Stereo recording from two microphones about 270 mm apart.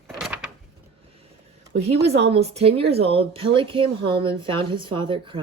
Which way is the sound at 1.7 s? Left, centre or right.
Right.